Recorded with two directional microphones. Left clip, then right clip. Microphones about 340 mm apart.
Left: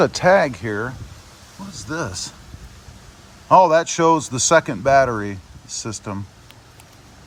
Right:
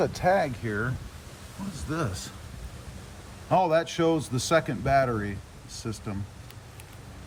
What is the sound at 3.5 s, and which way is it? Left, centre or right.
Speech, centre.